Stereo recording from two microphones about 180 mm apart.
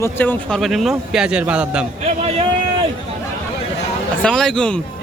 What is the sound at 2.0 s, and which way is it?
Speech, 35° right (ahead or behind).